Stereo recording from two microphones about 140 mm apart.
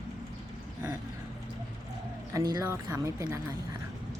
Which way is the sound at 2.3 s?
25° right (ahead or behind).